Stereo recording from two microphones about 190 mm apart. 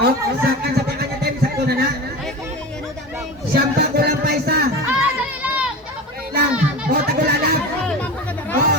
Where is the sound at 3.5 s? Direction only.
55° right (ahead or behind).